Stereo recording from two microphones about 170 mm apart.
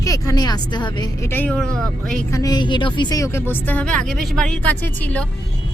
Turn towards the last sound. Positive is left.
turn(degrees=10)  # may be behind; listen again after turning